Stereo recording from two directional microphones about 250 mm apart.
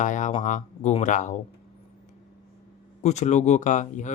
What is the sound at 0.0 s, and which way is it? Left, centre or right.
Speech, left.